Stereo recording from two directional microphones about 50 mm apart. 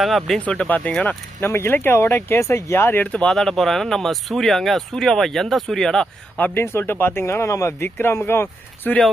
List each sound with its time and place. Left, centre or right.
0.0 s speech: centre
0.3 s speech: left
1.0 s speech: left
2.4 s speech: left
3.0 s speech: left
3.2 s speech: centre
6.5 s speech: left
7.4 s speech: left
7.9 s speech: left